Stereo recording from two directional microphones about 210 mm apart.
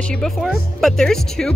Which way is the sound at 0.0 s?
5° left (ahead or behind).